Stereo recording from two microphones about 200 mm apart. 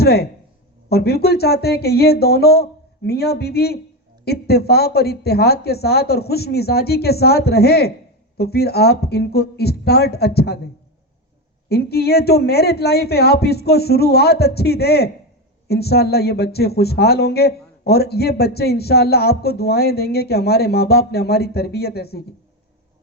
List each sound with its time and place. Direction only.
0.0 s a man's voice: 50° left (ahead or behind)
11.7 s a man's voice: 50° left (ahead or behind)